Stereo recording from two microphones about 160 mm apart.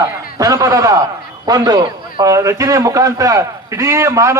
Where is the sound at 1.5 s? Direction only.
25° right (ahead or behind).